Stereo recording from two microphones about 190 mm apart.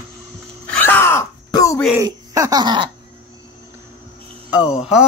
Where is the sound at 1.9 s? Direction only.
15° right (ahead or behind).